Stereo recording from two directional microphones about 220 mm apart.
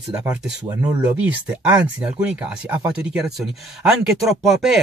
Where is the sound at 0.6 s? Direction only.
25° right (ahead or behind).